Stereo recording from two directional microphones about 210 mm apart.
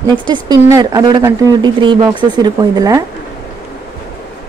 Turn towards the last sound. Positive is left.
turn(degrees=-15)  # may be behind; listen again after turning